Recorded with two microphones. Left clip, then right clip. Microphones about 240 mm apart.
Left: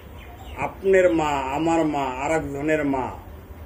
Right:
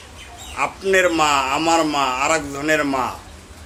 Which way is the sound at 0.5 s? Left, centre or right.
Centre.